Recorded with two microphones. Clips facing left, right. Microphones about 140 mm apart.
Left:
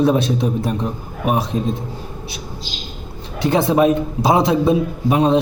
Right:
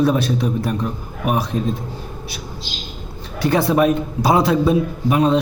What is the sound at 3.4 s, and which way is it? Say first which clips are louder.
A man's voice: left 1 dB; 25° left (ahead or behind).